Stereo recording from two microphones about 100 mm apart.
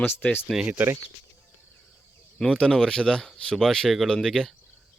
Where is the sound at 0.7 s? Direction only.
20° right (ahead or behind).